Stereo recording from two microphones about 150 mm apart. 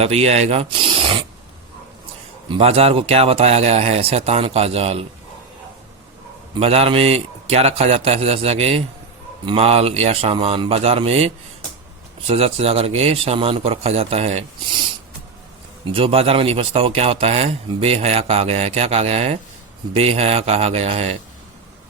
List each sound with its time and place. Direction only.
0.0 s a man's voice: 45° right (ahead or behind)
2.5 s speech: 40° right (ahead or behind)
6.5 s a man's voice: 40° right (ahead or behind)
12.3 s speech: 40° right (ahead or behind)
15.8 s a man's voice: 35° right (ahead or behind)